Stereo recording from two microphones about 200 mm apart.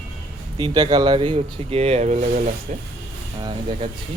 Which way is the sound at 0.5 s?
20° right (ahead or behind).